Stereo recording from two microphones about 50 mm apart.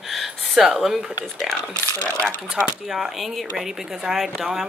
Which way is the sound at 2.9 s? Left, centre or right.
Centre.